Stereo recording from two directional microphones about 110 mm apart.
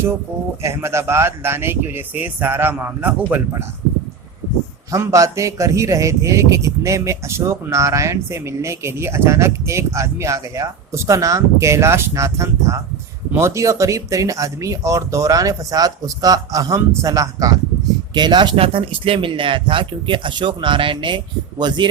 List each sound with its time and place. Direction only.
0.6 s a man's voice: 25° right (ahead or behind)
4.9 s a man's voice: 30° right (ahead or behind)
18.1 s speech: 40° right (ahead or behind)